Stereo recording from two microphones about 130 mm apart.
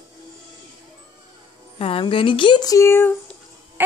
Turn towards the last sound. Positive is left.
turn(degrees=20)  # may be behind; listen again after turning